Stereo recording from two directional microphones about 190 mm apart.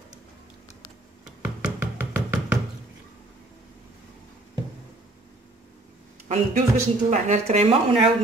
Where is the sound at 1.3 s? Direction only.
5° right (ahead or behind).